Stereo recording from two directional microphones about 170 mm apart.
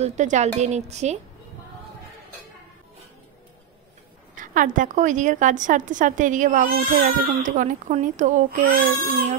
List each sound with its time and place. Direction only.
0.0 s speech: 45° right (ahead or behind)
4.4 s a woman's voice: 50° right (ahead or behind)